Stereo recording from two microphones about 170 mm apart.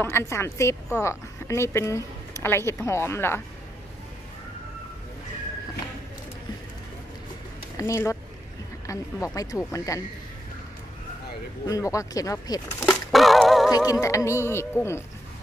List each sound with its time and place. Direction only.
0.0 s music: 15° left (ahead or behind)
0.9 s speech: 15° left (ahead or behind)
7.7 s speech: 20° left (ahead or behind)
11.6 s speech: 20° left (ahead or behind)
13.1 s music: centre (ahead or behind)
13.7 s music: 20° left (ahead or behind)